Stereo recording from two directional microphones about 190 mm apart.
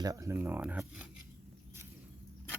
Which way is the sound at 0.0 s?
15° right (ahead or behind).